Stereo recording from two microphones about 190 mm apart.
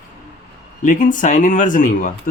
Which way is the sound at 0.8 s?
45° left (ahead or behind).